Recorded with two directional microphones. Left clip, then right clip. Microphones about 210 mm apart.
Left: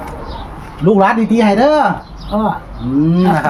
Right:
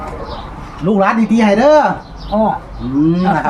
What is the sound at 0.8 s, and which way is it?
Speech, 35° left (ahead or behind).